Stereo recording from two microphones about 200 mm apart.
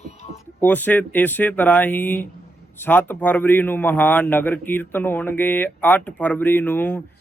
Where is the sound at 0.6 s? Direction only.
10° left (ahead or behind).